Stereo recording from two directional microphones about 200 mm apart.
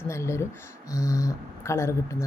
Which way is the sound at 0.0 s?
15° left (ahead or behind).